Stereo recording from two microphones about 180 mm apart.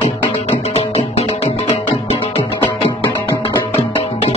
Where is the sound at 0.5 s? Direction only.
35° left (ahead or behind).